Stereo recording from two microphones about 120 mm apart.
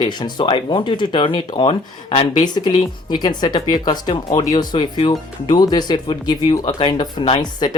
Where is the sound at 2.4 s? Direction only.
35° left (ahead or behind).